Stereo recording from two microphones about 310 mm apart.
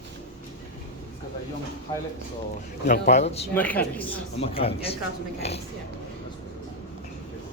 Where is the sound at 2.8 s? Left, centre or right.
Left.